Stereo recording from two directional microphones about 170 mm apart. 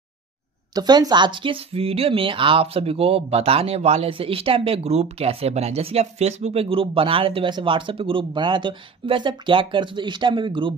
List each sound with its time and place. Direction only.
0.7 s speech: 25° right (ahead or behind)